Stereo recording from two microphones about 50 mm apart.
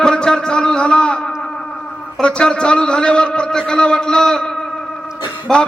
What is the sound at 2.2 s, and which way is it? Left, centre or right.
A man's voice, centre.